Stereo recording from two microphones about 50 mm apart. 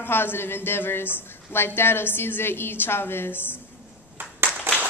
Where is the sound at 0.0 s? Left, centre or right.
Left.